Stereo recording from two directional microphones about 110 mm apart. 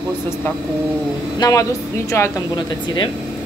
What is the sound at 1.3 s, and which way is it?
Speech, 30° left (ahead or behind).